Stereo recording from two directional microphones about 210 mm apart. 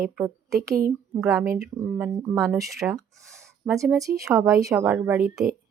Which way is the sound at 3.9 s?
15° right (ahead or behind).